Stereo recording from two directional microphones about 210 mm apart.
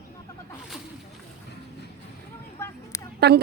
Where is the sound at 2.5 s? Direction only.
15° left (ahead or behind).